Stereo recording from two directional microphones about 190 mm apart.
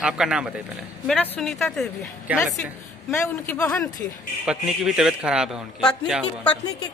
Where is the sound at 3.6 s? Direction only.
15° left (ahead or behind).